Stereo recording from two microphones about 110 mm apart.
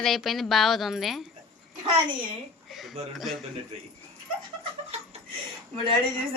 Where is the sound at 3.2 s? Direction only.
Centre (ahead or behind).